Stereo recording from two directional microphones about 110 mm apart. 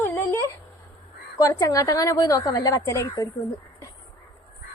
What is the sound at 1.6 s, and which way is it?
Music, 30° left (ahead or behind).